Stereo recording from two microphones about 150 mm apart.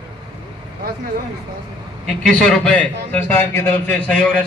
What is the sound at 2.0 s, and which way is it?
A man's voice, 5° left (ahead or behind).